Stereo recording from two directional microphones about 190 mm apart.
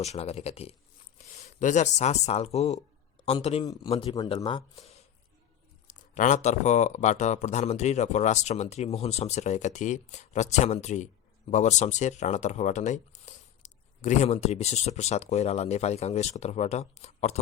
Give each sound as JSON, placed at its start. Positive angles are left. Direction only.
{"t": 0.0, "sound": "speech", "side_deg": 35}